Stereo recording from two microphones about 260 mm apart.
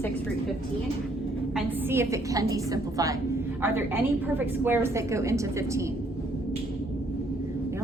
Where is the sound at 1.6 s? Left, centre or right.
Centre.